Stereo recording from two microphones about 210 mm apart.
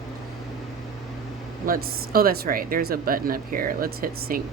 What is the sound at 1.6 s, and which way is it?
Speech, 45° right (ahead or behind).